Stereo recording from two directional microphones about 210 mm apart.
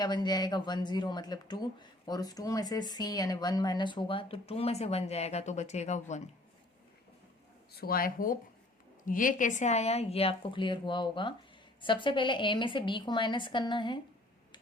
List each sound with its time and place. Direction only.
0.0 s speech: 20° left (ahead or behind)
7.7 s speech: 45° left (ahead or behind); by 14.0 s 20° left (ahead or behind)